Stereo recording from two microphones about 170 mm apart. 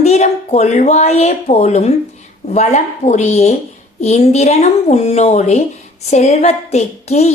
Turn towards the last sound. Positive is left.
turn(degrees=40)  # may be behind; listen again after turning